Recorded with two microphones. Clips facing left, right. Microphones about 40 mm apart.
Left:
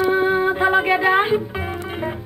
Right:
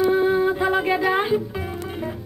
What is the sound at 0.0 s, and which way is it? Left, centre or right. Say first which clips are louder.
Music: left 1 dB; left.